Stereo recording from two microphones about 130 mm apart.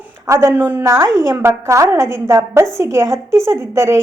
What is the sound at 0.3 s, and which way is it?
A woman's voice, 20° right (ahead or behind).